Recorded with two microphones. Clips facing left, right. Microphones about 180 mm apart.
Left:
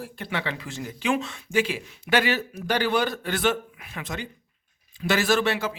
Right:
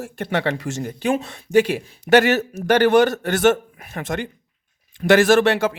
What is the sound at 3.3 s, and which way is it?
Speech, 45° right (ahead or behind).